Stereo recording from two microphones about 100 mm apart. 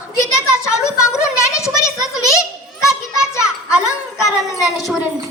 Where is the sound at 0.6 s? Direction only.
30° left (ahead or behind).